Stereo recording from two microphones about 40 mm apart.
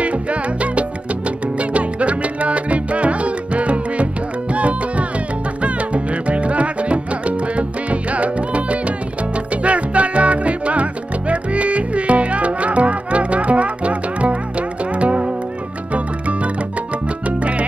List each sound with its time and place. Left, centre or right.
0.0 s salsa music: right
1.6 s music: right
17.4 s music: right